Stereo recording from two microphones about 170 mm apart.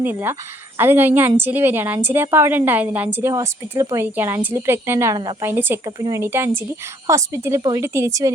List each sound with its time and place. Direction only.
0.0 s a woman's voice: 10° right (ahead or behind)
5.5 s a woman's voice: 10° right (ahead or behind)